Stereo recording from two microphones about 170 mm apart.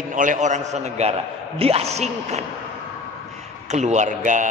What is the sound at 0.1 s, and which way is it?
A man's voice, 50° right (ahead or behind).